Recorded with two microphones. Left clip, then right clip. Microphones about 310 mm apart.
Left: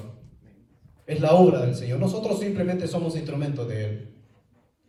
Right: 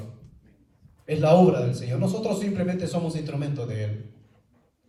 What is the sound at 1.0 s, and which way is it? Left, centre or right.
A man's voice, centre.